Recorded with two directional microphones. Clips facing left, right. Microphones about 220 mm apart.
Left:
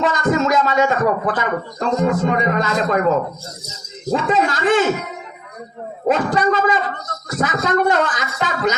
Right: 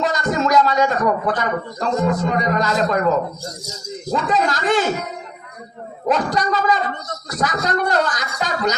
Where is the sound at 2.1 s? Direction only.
40° right (ahead or behind).